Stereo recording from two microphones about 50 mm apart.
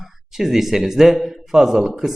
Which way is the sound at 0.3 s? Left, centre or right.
Centre.